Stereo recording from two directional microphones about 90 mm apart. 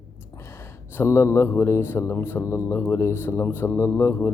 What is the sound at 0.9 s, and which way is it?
A man's voice, 30° left (ahead or behind).